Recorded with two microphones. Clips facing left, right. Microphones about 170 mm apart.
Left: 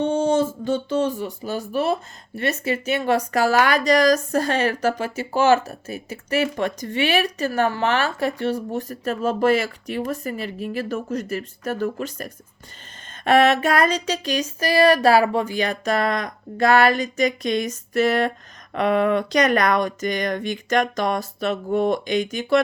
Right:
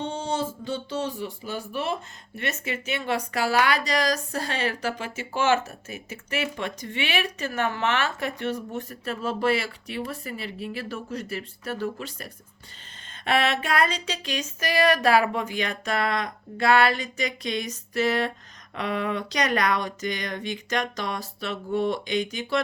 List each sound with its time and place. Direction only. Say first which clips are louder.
0.0 s speech: left 9 dB; 50° left (ahead or behind)
13.2 s a sound: left 8 dB; 45° left (ahead or behind)
18.7 s speech: left 9 dB; 55° left (ahead or behind)